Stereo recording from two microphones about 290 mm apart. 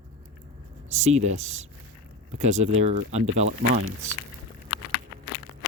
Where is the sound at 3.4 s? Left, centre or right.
Right.